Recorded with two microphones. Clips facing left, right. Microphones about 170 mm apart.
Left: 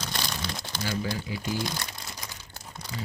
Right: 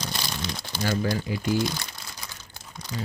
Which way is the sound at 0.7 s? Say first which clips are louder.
Right 6 dB; 5° right (ahead or behind).